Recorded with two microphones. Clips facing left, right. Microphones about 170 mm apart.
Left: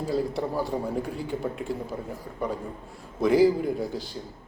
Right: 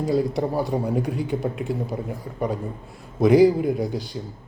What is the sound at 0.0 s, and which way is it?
Speech, 15° right (ahead or behind).